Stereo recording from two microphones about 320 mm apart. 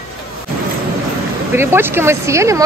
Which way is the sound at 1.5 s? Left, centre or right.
Centre.